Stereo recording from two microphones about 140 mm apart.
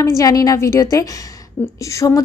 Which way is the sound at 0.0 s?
25° left (ahead or behind).